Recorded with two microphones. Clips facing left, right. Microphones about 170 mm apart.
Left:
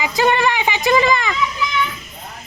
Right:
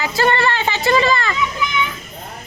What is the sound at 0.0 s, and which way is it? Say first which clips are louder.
Speech: left 1 dB; 15° left (ahead or behind).